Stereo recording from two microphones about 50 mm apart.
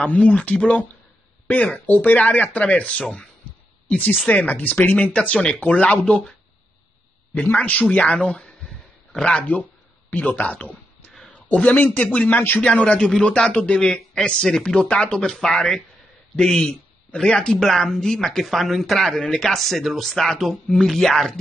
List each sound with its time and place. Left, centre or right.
0.0 s speech: left
3.9 s speech: left
7.5 s speech: left
8.3 s speech: centre; by 10.8 s left
11.2 s a sound: left
12.0 s a man's voice: left; by 21.3 s centre